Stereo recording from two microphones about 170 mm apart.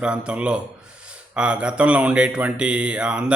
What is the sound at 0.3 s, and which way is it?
A man's voice, 5° right (ahead or behind).